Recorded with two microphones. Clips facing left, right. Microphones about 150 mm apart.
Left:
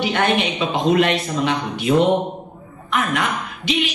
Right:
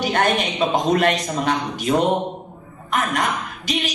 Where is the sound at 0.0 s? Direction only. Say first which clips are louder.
Left 1 dB; 40° right (ahead or behind).